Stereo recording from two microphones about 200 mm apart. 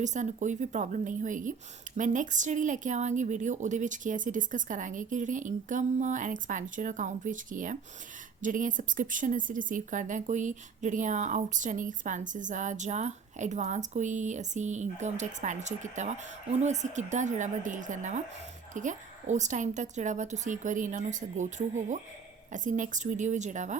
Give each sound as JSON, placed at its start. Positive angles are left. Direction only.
{"t": 0.0, "sound": "a woman's voice", "side_deg": -35}